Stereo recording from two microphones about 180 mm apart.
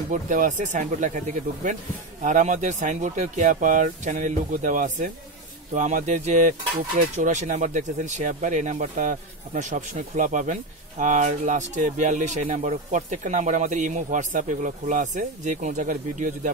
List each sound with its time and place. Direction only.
0.1 s speech: 45° right (ahead or behind)